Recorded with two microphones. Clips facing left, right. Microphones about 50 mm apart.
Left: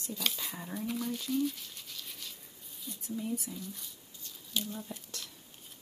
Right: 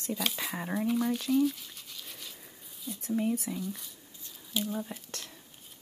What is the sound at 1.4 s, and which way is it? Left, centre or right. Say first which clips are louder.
Toothbrush: right 4 dB; centre.